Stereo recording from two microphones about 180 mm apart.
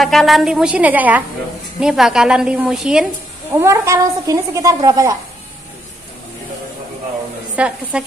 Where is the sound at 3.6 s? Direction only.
15° right (ahead or behind).